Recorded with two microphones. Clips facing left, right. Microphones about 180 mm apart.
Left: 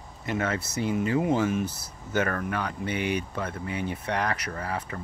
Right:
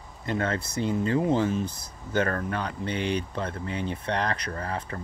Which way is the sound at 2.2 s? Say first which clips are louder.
Right 1 dB; 30° right (ahead or behind).